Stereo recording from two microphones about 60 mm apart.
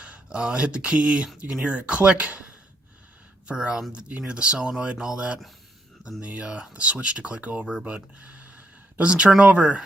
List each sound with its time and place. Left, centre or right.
0.0 s speech: centre
3.4 s speech: centre